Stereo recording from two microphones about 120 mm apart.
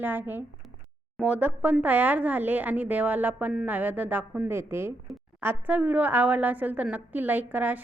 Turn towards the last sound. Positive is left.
turn(degrees=-15)  # may be behind; listen again after turning